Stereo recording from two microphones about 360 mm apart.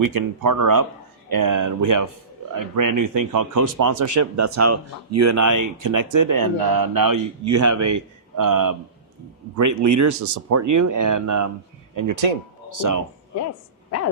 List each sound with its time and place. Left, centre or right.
0.1 s speech: right
9.6 s speech: right
12.6 s speech: right
13.9 s speech: left